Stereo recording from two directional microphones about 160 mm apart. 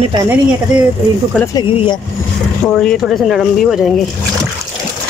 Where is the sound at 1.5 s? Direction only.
30° left (ahead or behind).